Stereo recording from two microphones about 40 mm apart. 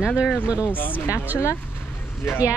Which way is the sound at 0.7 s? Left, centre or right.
Left.